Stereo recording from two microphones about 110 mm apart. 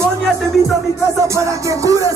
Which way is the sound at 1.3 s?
30° right (ahead or behind).